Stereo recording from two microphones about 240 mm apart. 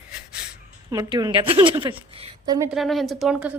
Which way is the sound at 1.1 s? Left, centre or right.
Centre.